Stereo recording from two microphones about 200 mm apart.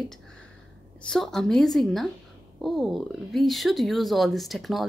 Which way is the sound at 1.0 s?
Centre (ahead or behind).